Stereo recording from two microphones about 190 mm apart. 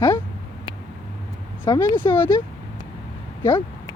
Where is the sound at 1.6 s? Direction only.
15° left (ahead or behind).